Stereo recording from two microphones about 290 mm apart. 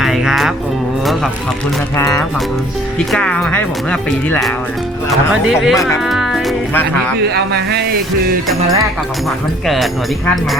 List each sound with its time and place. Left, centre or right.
0.0 s music: centre
2.0 s speech: centre
7.3 s speech: right
9.6 s speech: centre